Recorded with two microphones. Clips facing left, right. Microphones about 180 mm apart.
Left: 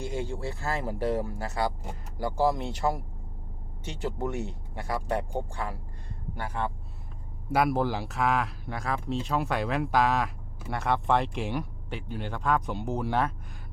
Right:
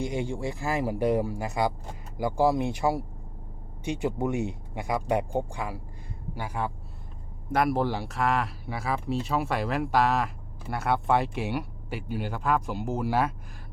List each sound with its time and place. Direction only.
0.0 s speech: 15° right (ahead or behind)